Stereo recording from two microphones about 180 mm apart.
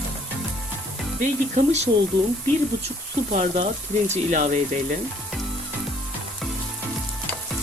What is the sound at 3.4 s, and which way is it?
Speech, 35° right (ahead or behind).